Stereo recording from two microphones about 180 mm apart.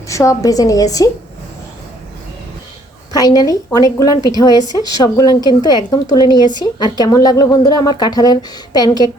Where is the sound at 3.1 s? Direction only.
20° left (ahead or behind).